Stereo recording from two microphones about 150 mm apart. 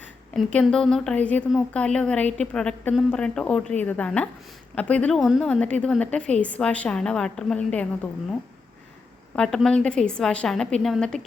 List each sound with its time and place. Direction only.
0.3 s a woman's voice: 5° left (ahead or behind)
9.3 s a woman's voice: 5° left (ahead or behind)